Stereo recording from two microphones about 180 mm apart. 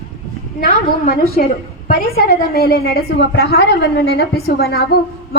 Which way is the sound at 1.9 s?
55° left (ahead or behind).